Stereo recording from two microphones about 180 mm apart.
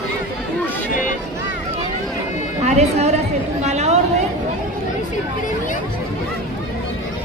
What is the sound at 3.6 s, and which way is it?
Chatter, 40° right (ahead or behind).